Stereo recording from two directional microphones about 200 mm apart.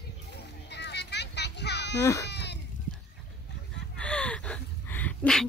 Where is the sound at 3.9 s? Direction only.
5° left (ahead or behind).